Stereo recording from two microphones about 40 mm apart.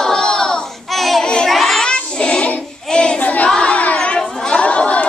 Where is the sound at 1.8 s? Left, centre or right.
Centre.